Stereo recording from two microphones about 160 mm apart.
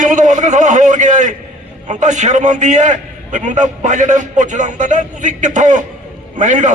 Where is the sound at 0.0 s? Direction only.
50° right (ahead or behind).